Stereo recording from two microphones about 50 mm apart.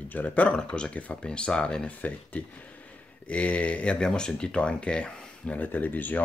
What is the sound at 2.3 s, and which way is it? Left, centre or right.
Speech, left.